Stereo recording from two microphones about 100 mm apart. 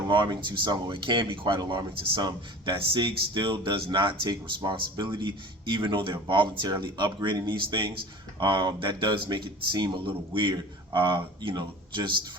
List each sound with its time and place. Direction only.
0.1 s speech: 50° right (ahead or behind)